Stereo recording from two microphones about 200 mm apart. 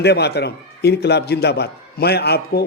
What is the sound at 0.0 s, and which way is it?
A man's voice, 55° left (ahead or behind).